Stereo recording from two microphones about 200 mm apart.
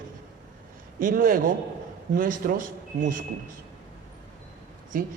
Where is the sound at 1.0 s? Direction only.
45° right (ahead or behind).